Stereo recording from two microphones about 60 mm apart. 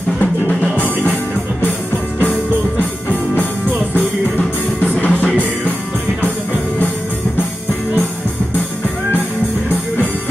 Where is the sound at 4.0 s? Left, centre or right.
Left.